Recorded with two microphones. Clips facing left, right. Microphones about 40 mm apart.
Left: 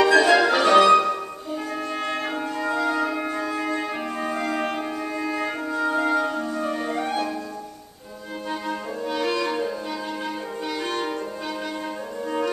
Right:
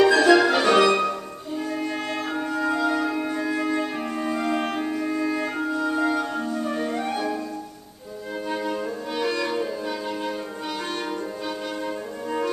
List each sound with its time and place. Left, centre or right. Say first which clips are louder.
0.0 s music: even; centre
5.8 s music: left 2 dB; left
6.7 s music: even; centre
8.5 s music: right 1 dB; centre